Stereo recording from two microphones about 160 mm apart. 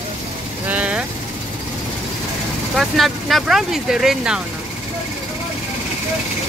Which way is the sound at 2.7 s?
Centre (ahead or behind).